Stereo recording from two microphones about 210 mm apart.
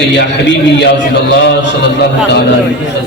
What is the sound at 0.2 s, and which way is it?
Speech, 55° left (ahead or behind).